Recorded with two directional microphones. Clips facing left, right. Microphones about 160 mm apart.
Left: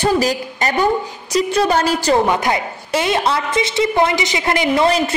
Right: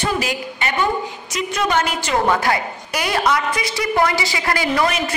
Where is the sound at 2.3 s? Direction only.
20° left (ahead or behind).